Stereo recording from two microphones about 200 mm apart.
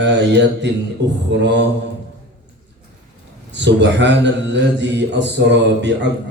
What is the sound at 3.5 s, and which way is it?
A man's voice, 60° right (ahead or behind).